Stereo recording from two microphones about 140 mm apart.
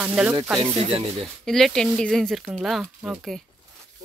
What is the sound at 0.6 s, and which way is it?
Speech, 40° right (ahead or behind).